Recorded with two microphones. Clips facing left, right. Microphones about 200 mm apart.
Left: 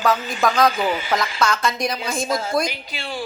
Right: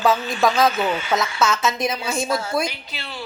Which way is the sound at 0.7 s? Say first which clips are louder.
Even; 10° left (ahead or behind).